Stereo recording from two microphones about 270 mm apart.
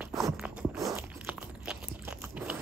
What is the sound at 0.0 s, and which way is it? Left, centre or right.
Crunch, centre.